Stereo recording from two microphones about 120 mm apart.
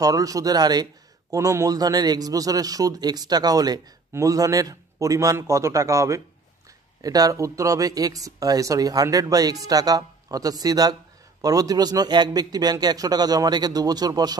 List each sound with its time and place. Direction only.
0.0 s a man's voice: 30° right (ahead or behind)